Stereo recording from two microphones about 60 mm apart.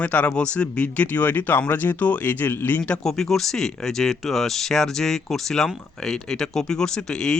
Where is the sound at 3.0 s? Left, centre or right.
Centre.